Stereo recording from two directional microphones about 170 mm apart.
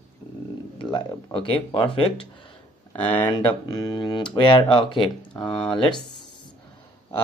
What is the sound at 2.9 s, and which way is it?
Speech, 10° left (ahead or behind).